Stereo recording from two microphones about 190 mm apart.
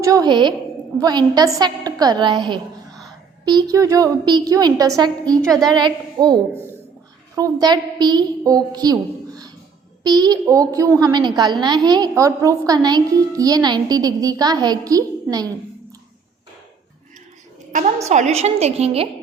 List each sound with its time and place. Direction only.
0.0 s a woman's voice: 20° right (ahead or behind)
17.7 s a sound: 40° right (ahead or behind)
18.1 s a woman's voice: 35° right (ahead or behind)